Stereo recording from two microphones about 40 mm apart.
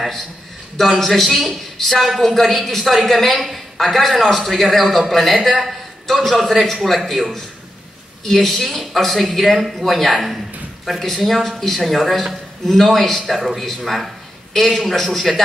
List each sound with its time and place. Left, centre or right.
0.7 s a woman's voice: centre
10.9 s a woman's voice: centre